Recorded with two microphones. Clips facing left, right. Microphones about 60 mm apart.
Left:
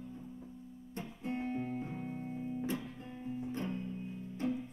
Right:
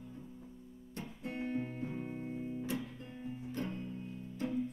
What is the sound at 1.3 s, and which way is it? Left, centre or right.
Music, right.